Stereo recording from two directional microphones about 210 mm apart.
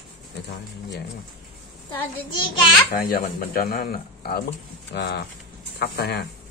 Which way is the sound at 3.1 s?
45° left (ahead or behind).